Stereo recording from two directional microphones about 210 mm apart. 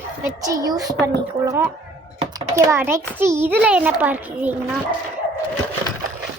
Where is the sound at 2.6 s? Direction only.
10° right (ahead or behind).